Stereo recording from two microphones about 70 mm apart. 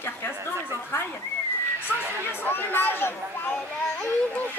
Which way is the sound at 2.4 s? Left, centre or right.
Left.